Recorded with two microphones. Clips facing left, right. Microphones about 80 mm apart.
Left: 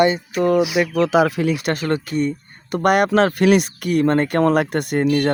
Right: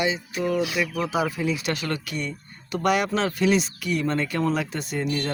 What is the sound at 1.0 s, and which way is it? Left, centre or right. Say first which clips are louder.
Speech: left 11 dB; left.